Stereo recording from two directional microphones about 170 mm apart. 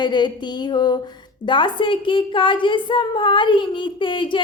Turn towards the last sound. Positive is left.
turn(degrees=30)  # may be behind; listen again after turning